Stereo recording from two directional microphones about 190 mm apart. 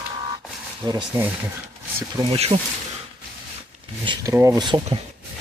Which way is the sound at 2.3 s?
30° right (ahead or behind).